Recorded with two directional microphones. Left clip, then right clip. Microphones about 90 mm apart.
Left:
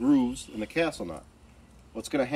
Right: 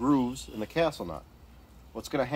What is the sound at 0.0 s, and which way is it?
Speech, 30° right (ahead or behind).